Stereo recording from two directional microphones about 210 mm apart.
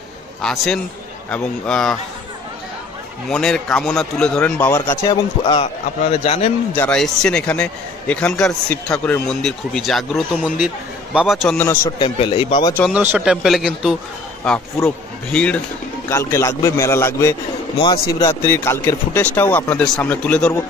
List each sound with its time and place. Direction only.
0.4 s a man's voice: centre (ahead or behind)
3.3 s a man's voice: 5° left (ahead or behind); by 6.5 s 30° left (ahead or behind)
6.7 s a man's voice: 5° left (ahead or behind)
12.0 s a man's voice: 25° left (ahead or behind)
12.9 s a man's voice: 5° right (ahead or behind); by 17.4 s 15° left (ahead or behind)
17.7 s a man's voice: 25° left (ahead or behind)
18.2 s a man's voice: 15° left (ahead or behind)